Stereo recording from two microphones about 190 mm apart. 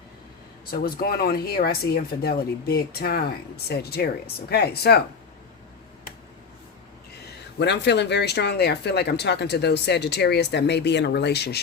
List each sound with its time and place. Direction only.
0.7 s speech: 50° left (ahead or behind)
7.6 s speech: 65° left (ahead or behind)